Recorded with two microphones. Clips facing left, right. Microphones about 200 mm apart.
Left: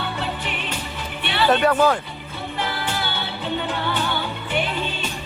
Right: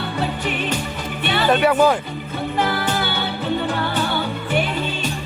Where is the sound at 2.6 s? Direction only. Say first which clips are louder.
Right 6 dB; 45° right (ahead or behind).